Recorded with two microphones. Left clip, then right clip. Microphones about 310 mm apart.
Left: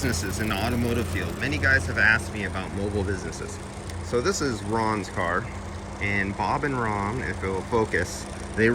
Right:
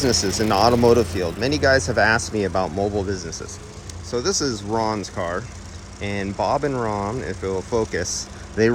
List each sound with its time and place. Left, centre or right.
0.0 s speech: centre